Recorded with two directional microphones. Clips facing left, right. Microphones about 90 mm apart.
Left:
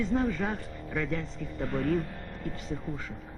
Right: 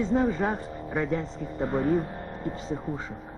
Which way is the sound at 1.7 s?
Centre (ahead or behind).